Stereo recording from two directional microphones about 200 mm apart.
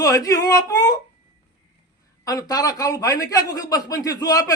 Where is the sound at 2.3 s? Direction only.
20° left (ahead or behind).